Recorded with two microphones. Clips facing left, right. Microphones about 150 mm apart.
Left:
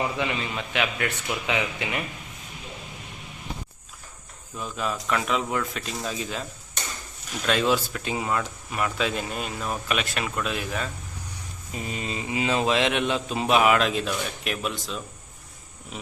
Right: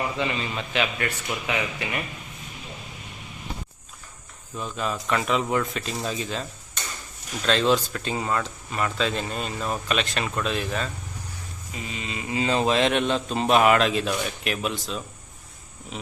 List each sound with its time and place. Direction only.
0.2 s speech: 5° left (ahead or behind)
4.5 s a man's voice: 5° left (ahead or behind)
7.4 s speech: 10° left (ahead or behind)
11.9 s speech: 45° left (ahead or behind)
12.3 s a man's voice: 10° left (ahead or behind)